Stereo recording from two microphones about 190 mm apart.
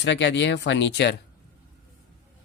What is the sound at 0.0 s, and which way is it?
Speech, 70° left (ahead or behind).